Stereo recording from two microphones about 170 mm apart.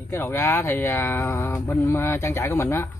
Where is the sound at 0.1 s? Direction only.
15° left (ahead or behind).